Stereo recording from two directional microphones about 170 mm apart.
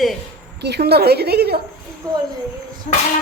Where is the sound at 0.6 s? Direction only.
75° right (ahead or behind).